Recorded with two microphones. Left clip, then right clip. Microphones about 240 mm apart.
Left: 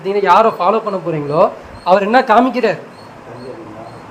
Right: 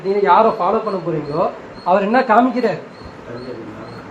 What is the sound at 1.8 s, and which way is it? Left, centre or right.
Speech, left.